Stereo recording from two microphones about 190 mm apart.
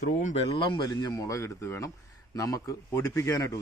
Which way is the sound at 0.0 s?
40° left (ahead or behind).